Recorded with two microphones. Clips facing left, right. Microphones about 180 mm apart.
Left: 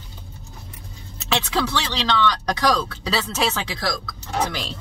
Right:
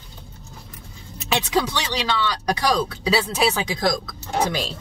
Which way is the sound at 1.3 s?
15° right (ahead or behind).